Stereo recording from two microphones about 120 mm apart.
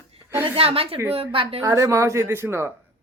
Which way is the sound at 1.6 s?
25° right (ahead or behind).